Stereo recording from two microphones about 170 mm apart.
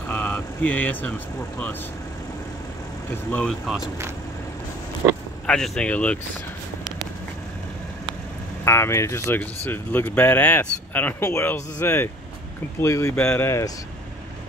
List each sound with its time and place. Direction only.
0.1 s vehicle: 10° left (ahead or behind)
3.1 s speech: 10° left (ahead or behind)
5.5 s speech: 5° left (ahead or behind)
8.6 s speech: 15° left (ahead or behind)